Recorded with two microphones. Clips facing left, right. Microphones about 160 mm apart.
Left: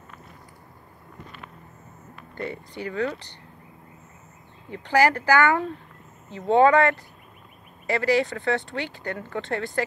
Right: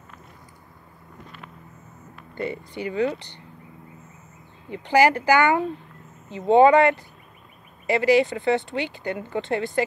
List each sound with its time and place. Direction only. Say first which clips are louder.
2.1 s speech: right 3 dB; centre (ahead or behind)
4.6 s speech: right 2 dB; centre (ahead or behind)